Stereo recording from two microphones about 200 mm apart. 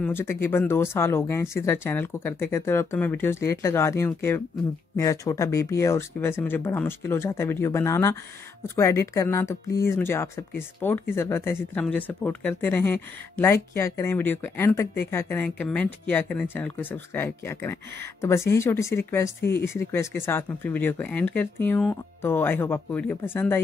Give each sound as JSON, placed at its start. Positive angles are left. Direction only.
{"t": 0.0, "sound": "speech", "side_deg": 10}